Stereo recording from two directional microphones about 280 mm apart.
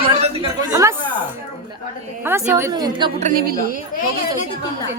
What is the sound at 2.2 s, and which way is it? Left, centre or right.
A woman's voice, centre.